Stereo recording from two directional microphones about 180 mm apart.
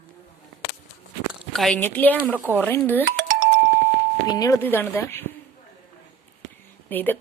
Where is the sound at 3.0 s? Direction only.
50° right (ahead or behind).